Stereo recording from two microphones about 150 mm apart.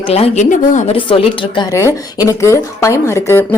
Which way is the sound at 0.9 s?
35° left (ahead or behind).